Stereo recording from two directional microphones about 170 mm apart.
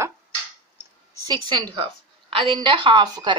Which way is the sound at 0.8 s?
25° right (ahead or behind).